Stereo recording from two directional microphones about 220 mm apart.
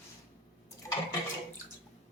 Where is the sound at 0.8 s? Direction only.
15° left (ahead or behind).